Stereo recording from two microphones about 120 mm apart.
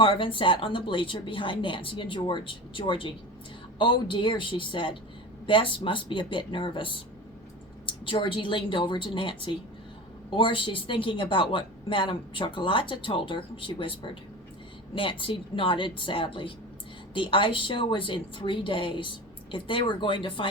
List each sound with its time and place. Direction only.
0.0 s a woman's voice: 45° left (ahead or behind)